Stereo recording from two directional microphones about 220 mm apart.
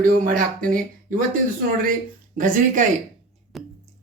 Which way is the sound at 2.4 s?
35° right (ahead or behind).